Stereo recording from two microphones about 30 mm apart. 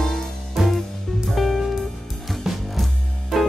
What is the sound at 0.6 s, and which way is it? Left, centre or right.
Music, centre.